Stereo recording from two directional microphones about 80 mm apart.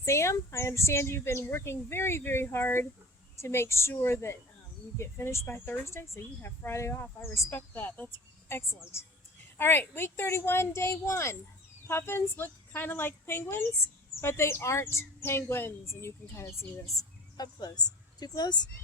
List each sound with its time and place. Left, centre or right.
0.0 s speech: left
17.0 s a woman's voice: left